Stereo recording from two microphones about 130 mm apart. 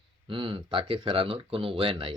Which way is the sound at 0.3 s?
40° right (ahead or behind).